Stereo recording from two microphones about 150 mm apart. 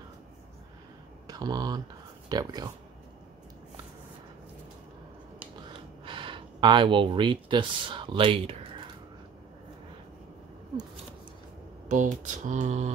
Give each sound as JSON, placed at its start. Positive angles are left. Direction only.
{"t": 1.2, "sound": "speech", "side_deg": -25}
{"t": 5.7, "sound": "speech", "side_deg": -35}
{"t": 11.9, "sound": "mantra", "side_deg": -55}